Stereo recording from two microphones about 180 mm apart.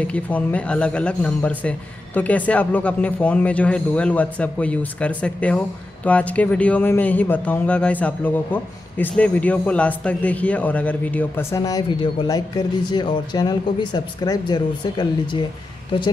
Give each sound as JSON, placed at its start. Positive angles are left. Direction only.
{"t": 0.0, "sound": "speech", "side_deg": 10}